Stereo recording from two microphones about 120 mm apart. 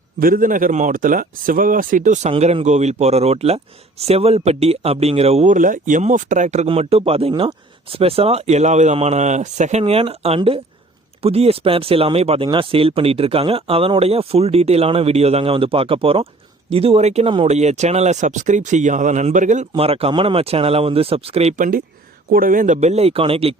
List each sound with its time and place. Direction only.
0.4 s speech: 90° right
2.4 s speech: 65° right (ahead or behind); by 6.7 s 80° right
6.7 s speech: 55° right (ahead or behind); by 9.8 s 80° right
9.8 s speech: 55° right (ahead or behind)
17.2 s speech: 45° right (ahead or behind)
17.5 s speech: 70° right (ahead or behind); by 19.6 s 90° right
19.7 s speech: 55° right (ahead or behind)
22.4 s speech: 90° right; by 23.6 s 55° right (ahead or behind)